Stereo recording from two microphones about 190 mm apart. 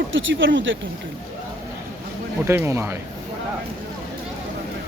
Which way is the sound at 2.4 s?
15° right (ahead or behind).